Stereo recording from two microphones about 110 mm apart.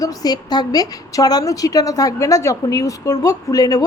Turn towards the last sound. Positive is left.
turn(degrees=35)  # may be behind; listen again after turning